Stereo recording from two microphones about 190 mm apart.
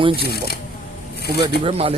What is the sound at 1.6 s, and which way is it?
Speech, 30° right (ahead or behind).